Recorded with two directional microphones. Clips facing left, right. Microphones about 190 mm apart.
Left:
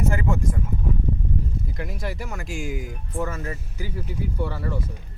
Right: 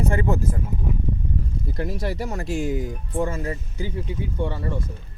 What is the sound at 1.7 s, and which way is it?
Speech, 35° right (ahead or behind).